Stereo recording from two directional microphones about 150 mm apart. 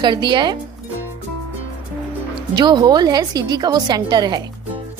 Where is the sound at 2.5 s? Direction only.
30° right (ahead or behind).